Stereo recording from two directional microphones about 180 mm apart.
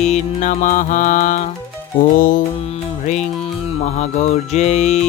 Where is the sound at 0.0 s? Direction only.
40° left (ahead or behind).